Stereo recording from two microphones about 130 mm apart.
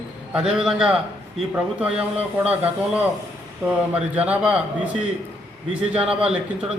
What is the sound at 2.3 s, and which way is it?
Speech, 10° right (ahead or behind).